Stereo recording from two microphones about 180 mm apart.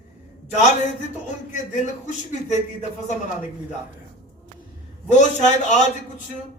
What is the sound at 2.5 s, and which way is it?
Speech, 40° left (ahead or behind).